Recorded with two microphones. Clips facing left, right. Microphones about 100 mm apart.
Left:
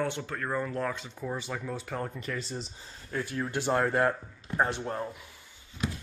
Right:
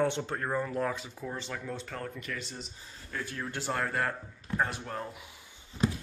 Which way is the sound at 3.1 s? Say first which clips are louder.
Left 5 dB; 20° left (ahead or behind).